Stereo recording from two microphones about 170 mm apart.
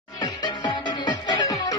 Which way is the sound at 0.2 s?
25° left (ahead or behind).